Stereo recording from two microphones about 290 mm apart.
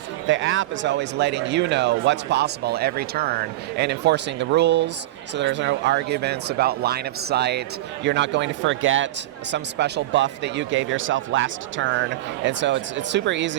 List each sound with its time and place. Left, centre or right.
0.3 s speech: right